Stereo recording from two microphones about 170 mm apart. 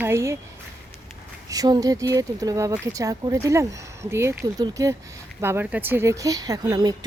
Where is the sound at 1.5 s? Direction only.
20° right (ahead or behind).